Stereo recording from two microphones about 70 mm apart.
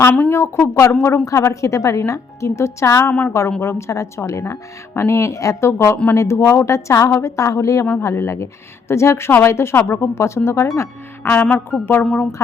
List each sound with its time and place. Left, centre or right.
0.3 s speech: left
0.9 s speech: left
1.2 s a woman's voice: left
3.1 s a woman's voice: left
3.6 s a woman's voice: left
12.0 s speech: centre